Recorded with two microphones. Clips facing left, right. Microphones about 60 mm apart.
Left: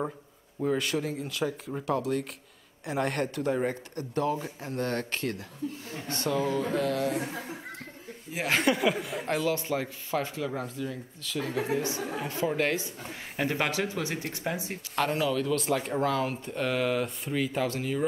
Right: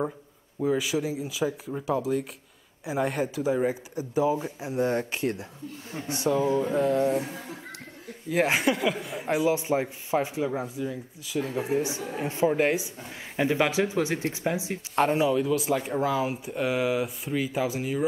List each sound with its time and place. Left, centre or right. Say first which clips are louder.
0.6 s speech: right 2 dB; centre; by 7.2 s right
8.5 s speech: even; centre
9.5 s speech: right 4 dB; centre
11.5 s speech: right 1 dB; left
12.2 s speech: right 6 dB; right
15.5 s speech: right 2 dB; centre